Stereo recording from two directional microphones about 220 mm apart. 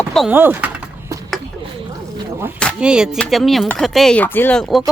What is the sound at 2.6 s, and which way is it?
Speech, centre (ahead or behind).